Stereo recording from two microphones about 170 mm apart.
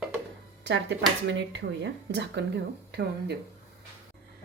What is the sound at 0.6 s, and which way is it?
Speech, 90° right.